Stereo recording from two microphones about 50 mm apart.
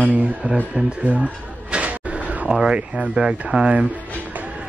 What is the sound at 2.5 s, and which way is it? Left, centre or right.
Speech, centre.